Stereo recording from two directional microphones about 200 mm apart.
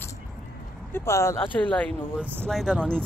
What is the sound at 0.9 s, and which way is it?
Speech, 15° left (ahead or behind).